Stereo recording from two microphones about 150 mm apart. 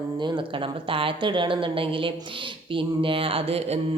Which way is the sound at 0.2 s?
35° right (ahead or behind).